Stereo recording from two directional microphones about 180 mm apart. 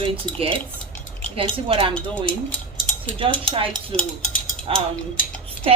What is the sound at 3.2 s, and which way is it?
Speech, 30° right (ahead or behind).